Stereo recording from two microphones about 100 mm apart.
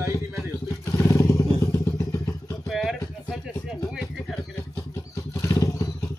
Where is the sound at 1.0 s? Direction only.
30° left (ahead or behind).